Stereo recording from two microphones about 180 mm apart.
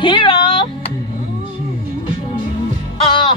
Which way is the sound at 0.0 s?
25° left (ahead or behind).